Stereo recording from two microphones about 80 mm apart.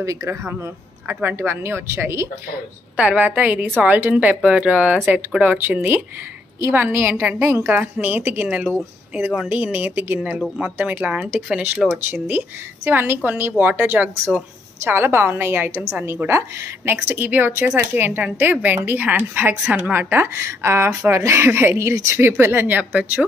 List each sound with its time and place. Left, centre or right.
0.0 s speech: right
1.0 s speech: right
3.0 s speech: centre
7.7 s speech: right